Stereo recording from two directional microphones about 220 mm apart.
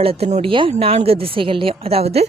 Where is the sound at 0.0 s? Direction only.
25° right (ahead or behind).